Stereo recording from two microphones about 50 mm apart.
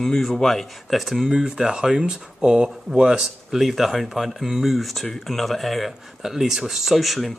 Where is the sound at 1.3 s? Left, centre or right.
Centre.